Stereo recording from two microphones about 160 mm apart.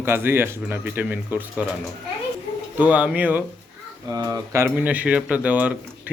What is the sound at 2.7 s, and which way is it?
Speech, 10° right (ahead or behind).